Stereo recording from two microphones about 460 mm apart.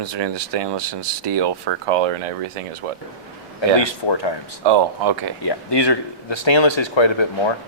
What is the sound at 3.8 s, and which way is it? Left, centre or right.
Speech, left.